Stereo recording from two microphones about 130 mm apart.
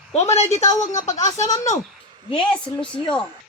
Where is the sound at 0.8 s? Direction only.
65° left (ahead or behind).